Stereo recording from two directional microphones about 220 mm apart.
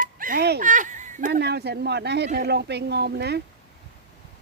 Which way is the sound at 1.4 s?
50° right (ahead or behind).